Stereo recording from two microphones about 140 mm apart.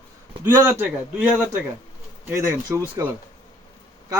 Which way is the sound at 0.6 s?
15° right (ahead or behind).